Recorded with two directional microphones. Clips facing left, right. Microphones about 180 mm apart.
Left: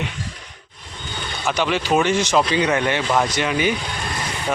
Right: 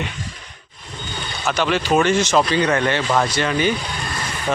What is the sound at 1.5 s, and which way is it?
Speech, 15° left (ahead or behind).